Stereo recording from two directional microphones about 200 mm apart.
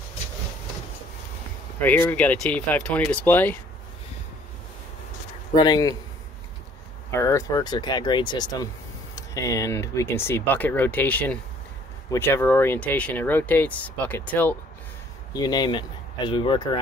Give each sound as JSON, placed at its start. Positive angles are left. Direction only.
{"t": 1.8, "sound": "speech", "side_deg": 10}
{"t": 5.5, "sound": "speech", "side_deg": 20}
{"t": 7.1, "sound": "speech", "side_deg": 15}
{"t": 15.3, "sound": "speech", "side_deg": 20}